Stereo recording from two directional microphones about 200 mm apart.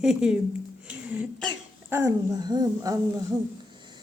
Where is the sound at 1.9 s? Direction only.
10° right (ahead or behind).